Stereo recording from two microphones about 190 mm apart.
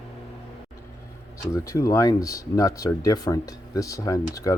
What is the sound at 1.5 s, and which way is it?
Speech, 15° left (ahead or behind).